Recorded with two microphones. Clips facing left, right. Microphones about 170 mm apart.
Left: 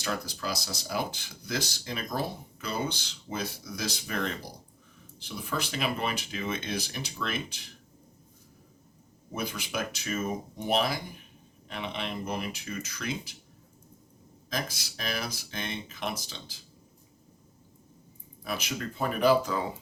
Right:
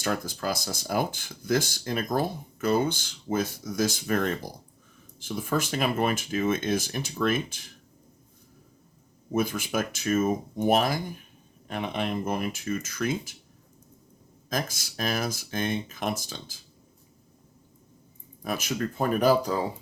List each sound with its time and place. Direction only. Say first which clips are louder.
0.0 s speech: right 4 dB; 50° right (ahead or behind)
9.3 s speech: right 7 dB; 50° right (ahead or behind)
14.5 s speech: right 4 dB; 45° right (ahead or behind)
18.4 s speech: right 5 dB; 45° right (ahead or behind)